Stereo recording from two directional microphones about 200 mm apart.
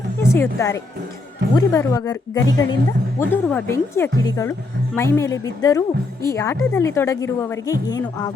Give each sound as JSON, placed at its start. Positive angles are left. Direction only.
{"t": 0.2, "sound": "a woman's voice", "side_deg": 15}